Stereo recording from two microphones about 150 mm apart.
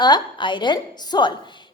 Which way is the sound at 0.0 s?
30° left (ahead or behind).